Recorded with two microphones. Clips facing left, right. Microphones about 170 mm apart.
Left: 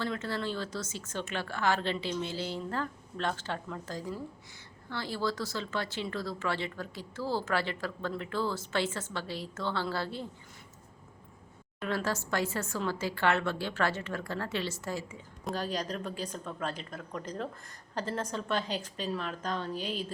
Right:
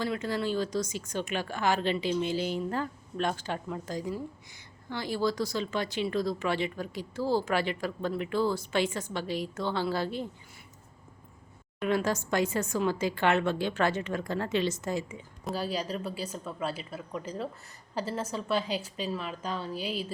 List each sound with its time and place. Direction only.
0.0 s speech: 15° right (ahead or behind)
11.8 s speech: 15° right (ahead or behind)
15.4 s speech: 5° right (ahead or behind)